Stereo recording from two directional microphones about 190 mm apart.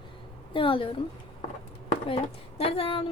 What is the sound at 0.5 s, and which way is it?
Speech, 25° left (ahead or behind).